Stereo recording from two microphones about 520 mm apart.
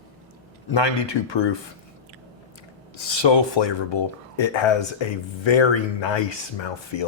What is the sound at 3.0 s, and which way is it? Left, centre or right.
Speech, left.